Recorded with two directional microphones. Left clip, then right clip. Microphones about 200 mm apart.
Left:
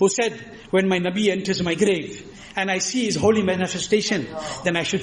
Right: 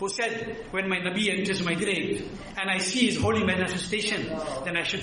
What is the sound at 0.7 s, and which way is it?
A man's voice, 35° left (ahead or behind).